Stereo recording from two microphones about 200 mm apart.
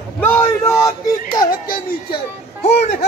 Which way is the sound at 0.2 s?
10° left (ahead or behind).